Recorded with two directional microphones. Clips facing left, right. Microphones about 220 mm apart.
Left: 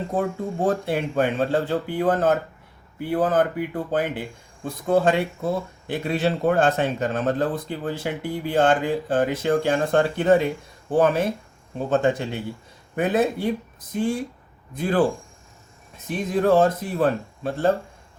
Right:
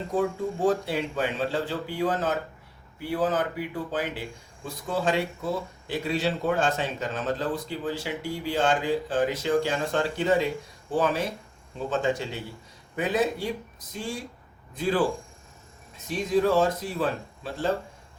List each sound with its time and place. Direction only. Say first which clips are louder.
0.1 s a man's voice: right 1 dB; 55° left (ahead or behind)
16.0 s speech: left 3 dB; 55° left (ahead or behind)